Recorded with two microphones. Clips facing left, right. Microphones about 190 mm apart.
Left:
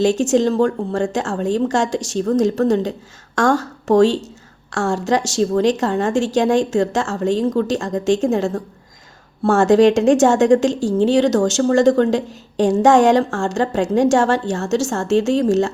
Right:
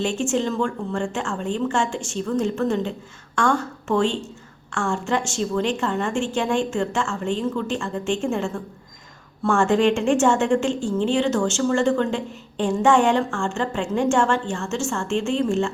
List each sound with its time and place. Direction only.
0.0 s a woman's voice: 40° left (ahead or behind)